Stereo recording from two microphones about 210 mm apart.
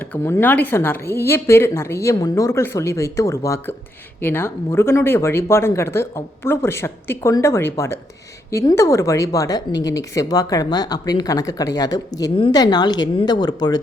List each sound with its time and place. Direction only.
0.0 s a woman's voice: 10° left (ahead or behind)